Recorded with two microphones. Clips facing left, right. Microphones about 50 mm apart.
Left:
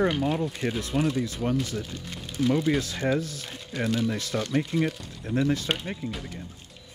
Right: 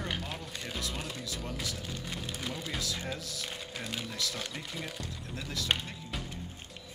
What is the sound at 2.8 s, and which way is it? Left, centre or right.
Speech, left.